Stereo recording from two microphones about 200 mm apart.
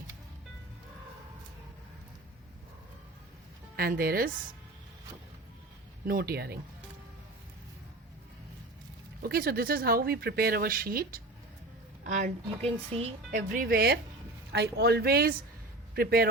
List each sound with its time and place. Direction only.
3.8 s speech: 50° right (ahead or behind)
6.1 s speech: 50° right (ahead or behind)
9.2 s a woman's voice: 50° right (ahead or behind)